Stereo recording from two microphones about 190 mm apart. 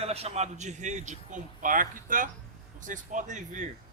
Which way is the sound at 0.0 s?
30° right (ahead or behind).